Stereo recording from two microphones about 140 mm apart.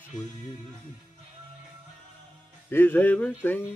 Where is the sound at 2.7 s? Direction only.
15° left (ahead or behind).